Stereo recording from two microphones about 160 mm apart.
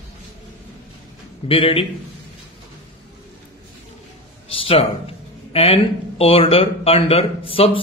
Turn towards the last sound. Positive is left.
turn(degrees=35)  # may be behind; listen again after turning